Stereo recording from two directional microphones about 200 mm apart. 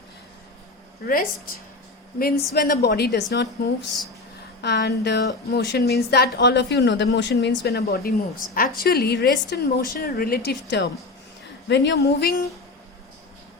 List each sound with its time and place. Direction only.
1.0 s a woman's voice: 45° left (ahead or behind)